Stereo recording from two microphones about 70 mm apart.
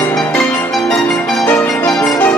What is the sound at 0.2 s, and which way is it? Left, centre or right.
Music, left.